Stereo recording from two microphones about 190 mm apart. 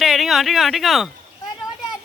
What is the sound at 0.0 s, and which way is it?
Speech, centre (ahead or behind).